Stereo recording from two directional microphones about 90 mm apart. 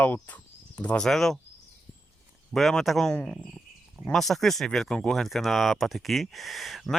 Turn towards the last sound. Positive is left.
turn(degrees=0)  # may be behind; listen again after turning